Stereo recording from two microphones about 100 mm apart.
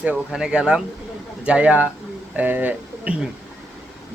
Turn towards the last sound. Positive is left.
turn(degrees=-15)  # may be behind; listen again after turning